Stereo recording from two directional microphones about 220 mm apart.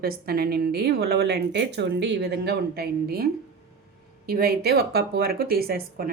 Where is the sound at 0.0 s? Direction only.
45° right (ahead or behind).